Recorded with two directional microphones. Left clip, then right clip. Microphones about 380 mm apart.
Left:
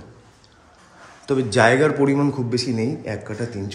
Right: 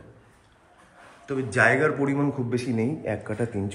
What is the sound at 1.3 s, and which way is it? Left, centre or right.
A man's voice, centre.